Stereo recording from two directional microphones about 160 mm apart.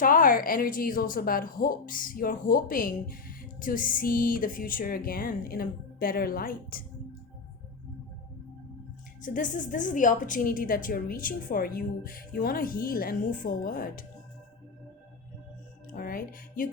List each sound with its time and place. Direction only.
0.0 s a woman's voice: 60° left (ahead or behind)
9.2 s a woman's voice: 55° left (ahead or behind)
15.9 s speech: 65° left (ahead or behind)